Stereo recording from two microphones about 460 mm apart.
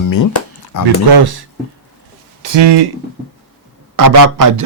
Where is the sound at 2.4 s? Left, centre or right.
Right.